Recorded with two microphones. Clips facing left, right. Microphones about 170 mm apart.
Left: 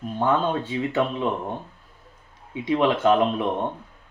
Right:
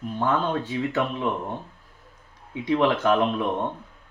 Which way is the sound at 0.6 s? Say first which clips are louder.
Left 1 dB; 25° left (ahead or behind).